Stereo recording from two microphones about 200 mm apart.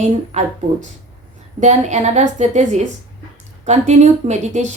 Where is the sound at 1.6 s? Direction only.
35° right (ahead or behind).